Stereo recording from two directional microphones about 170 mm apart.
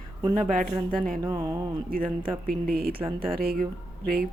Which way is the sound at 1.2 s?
20° right (ahead or behind).